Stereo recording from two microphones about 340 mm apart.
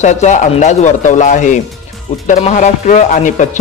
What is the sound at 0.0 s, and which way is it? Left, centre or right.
Speech, left.